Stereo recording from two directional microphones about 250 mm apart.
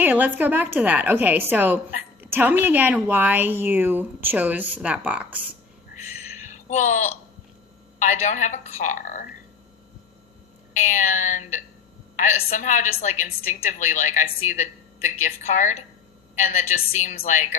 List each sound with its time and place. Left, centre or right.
0.0 s a woman's voice: centre
6.4 s a sound: left
7.9 s a woman's voice: left
10.8 s a woman's voice: left